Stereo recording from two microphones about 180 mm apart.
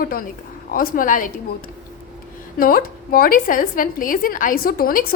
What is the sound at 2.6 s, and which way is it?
A woman's voice, 55° left (ahead or behind).